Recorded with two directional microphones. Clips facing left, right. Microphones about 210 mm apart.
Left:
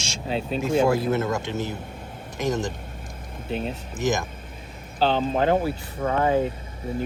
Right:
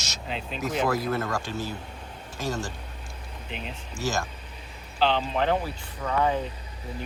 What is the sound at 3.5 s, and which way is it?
Speech, 45° left (ahead or behind).